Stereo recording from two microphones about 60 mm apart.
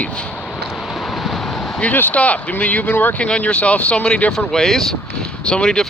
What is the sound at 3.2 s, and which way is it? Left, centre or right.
Speech, centre.